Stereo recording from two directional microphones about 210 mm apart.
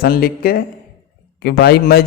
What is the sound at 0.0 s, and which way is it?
A man's voice, 45° left (ahead or behind).